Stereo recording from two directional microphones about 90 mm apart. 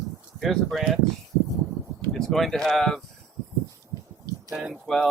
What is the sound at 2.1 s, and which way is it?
Speech, 5° left (ahead or behind).